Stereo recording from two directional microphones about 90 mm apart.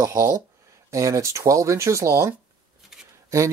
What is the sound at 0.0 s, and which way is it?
Speech, 35° right (ahead or behind).